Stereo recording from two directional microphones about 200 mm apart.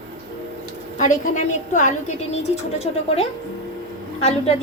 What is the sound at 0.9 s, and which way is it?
Speech, 35° left (ahead or behind).